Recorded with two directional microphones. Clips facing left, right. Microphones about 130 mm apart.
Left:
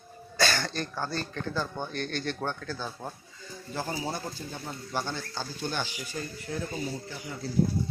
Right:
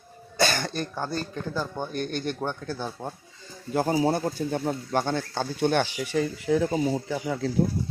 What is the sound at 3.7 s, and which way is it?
Speech, 55° right (ahead or behind).